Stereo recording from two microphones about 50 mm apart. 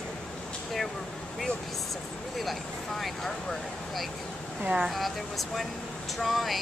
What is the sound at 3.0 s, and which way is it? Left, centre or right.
Speech, centre.